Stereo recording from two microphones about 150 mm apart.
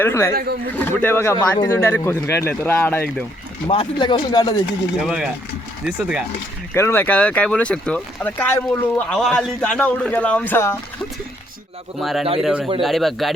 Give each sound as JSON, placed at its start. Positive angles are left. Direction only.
{"t": 0.0, "sound": "speech", "side_deg": 20}
{"t": 0.3, "sound": "speech", "side_deg": -90}
{"t": 0.8, "sound": "speech", "side_deg": 15}
{"t": 3.7, "sound": "speech", "side_deg": 35}
{"t": 4.9, "sound": "speech", "side_deg": -5}
{"t": 6.7, "sound": "speech", "side_deg": 15}
{"t": 11.9, "sound": "speech", "side_deg": 0}